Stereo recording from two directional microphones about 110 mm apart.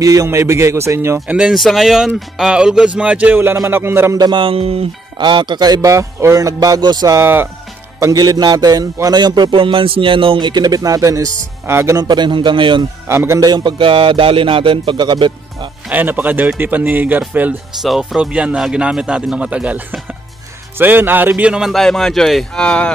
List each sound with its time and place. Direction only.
0.0 s a man's voice: 30° right (ahead or behind)
1.2 s a man's voice: 10° right (ahead or behind)
4.2 s music: 50° right (ahead or behind)
5.2 s a man's voice: 45° right (ahead or behind)
7.2 s a man's voice: 20° right (ahead or behind)
8.0 s a man's voice: 35° right (ahead or behind)
12.0 s speech: 40° right (ahead or behind)
13.1 s a man's voice: 20° right (ahead or behind)
13.4 s speech: 40° right (ahead or behind)
15.9 s speech: 15° right (ahead or behind)
17.8 s a man's voice: 5° right (ahead or behind)